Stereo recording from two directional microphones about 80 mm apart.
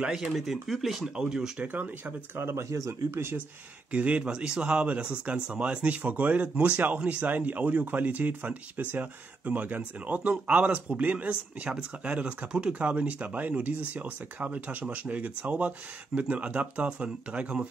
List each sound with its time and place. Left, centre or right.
0.0 s speech: centre
1.7 s speech: right
3.9 s speech: centre